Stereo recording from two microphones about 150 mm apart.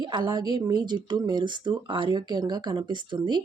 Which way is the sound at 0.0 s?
30° right (ahead or behind).